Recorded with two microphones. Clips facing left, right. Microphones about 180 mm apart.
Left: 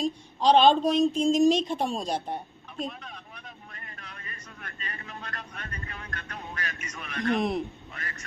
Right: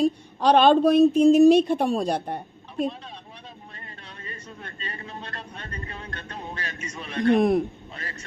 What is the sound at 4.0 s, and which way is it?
Speech, 30° right (ahead or behind).